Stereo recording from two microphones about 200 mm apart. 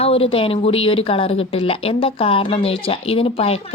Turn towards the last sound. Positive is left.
turn(degrees=30)  # may be behind; listen again after turning